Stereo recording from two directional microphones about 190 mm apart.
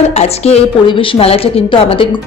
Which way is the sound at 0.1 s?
35° left (ahead or behind).